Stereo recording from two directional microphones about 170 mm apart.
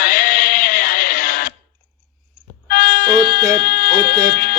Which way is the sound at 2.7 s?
50° left (ahead or behind).